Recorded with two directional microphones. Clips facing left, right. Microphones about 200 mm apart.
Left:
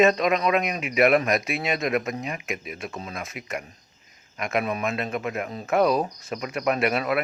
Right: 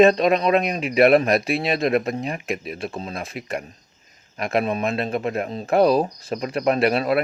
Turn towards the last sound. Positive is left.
turn(degrees=-30)  # may be behind; listen again after turning